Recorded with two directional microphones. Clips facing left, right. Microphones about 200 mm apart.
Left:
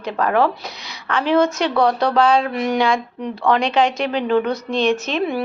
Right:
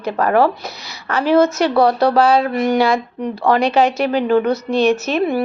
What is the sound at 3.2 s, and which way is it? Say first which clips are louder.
Speech: right 2 dB; 40° right (ahead or behind).